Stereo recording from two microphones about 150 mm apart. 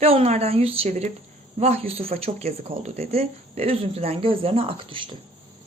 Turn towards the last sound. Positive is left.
turn(degrees=-35)  # may be behind; listen again after turning